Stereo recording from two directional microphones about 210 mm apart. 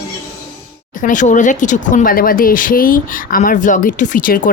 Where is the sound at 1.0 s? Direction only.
35° left (ahead or behind).